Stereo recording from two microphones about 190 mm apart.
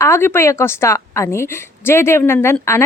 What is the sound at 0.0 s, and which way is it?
Speech, 15° left (ahead or behind).